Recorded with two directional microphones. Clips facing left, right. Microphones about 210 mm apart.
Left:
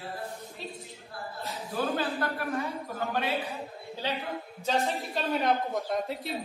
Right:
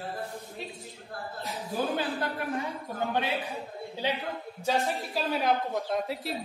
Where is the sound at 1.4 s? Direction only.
15° right (ahead or behind).